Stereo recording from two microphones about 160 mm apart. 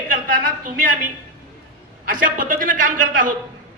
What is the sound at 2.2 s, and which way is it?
A woman's voice, 60° right (ahead or behind).